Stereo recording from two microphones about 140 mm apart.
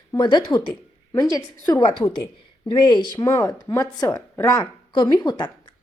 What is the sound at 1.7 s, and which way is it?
Speech, 35° left (ahead or behind).